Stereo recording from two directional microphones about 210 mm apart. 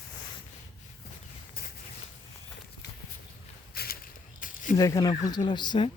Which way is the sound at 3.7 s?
45° left (ahead or behind).